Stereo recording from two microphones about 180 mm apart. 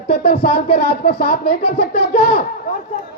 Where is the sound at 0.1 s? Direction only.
60° left (ahead or behind).